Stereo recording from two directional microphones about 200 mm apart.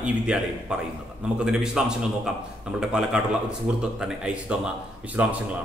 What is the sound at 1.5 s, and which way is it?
A man's voice, 5° right (ahead or behind).